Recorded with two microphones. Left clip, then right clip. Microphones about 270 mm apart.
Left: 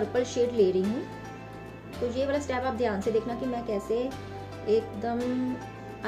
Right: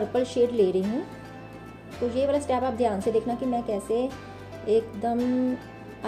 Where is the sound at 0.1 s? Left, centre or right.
Centre.